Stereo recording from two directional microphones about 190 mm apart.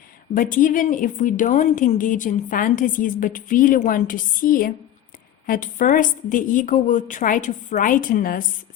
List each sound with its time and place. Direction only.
0.3 s a woman's voice: 45° left (ahead or behind)